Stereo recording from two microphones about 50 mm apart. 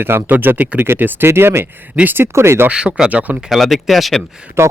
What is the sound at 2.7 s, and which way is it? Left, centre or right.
Speech, centre.